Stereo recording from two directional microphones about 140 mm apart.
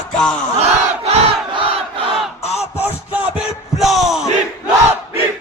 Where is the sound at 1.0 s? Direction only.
45° right (ahead or behind).